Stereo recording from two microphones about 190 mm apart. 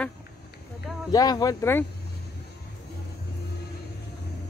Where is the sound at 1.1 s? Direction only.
20° left (ahead or behind).